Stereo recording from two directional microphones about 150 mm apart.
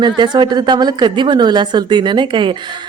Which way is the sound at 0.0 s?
30° right (ahead or behind).